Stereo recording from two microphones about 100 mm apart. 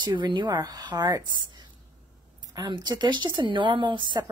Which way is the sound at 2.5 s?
50° right (ahead or behind).